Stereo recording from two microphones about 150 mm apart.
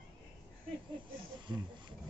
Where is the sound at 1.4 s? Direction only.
30° right (ahead or behind).